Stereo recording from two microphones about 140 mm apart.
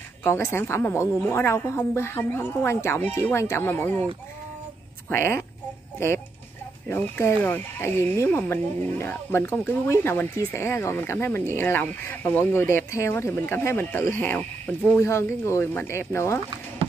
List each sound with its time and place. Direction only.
0.2 s speech: 20° left (ahead or behind)
5.1 s speech: 15° left (ahead or behind)
5.9 s chicken: 15° left (ahead or behind)
6.9 s speech: 15° left (ahead or behind)